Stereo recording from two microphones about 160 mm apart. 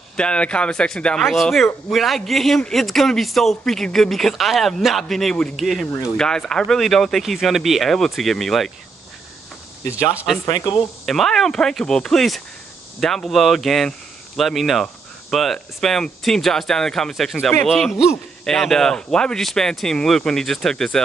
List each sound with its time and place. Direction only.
0.2 s speech: 5° left (ahead or behind)
10.1 s speech: centre (ahead or behind)
10.4 s speech: 25° left (ahead or behind)
11.1 s speech: centre (ahead or behind)